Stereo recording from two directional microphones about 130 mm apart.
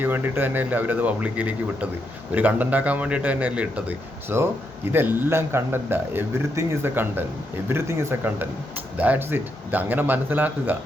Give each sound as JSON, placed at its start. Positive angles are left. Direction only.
{"t": 0.0, "sound": "speech", "side_deg": -15}